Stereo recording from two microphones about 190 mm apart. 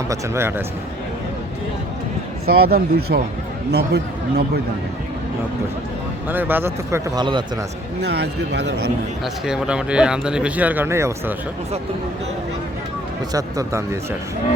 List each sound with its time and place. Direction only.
0.1 s speech: 15° right (ahead or behind)
2.5 s a man's voice: 55° right (ahead or behind)
6.2 s speech: 10° right (ahead or behind)
7.3 s a man's voice: 25° right (ahead or behind)
8.0 s a man's voice: 60° right (ahead or behind)
9.2 s speech: 5° right (ahead or behind)
13.3 s speech: 15° right (ahead or behind)